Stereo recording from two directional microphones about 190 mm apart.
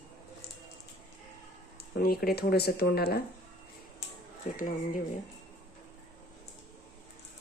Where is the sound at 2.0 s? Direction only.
55° left (ahead or behind).